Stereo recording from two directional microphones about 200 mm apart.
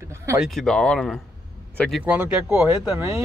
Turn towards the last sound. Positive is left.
turn(degrees=-5)  # may be behind; listen again after turning